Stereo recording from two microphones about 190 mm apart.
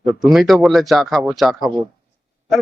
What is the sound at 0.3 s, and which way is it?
A man's voice, centre (ahead or behind).